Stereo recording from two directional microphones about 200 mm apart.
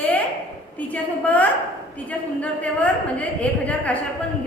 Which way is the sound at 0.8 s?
5° left (ahead or behind).